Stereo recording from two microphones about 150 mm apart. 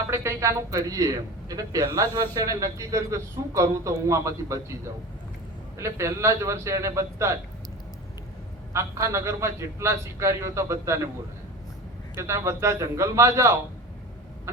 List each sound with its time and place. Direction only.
0.1 s a man's voice: 20° right (ahead or behind)
8.7 s a man's voice: 20° right (ahead or behind)
12.1 s a man's voice: 20° right (ahead or behind)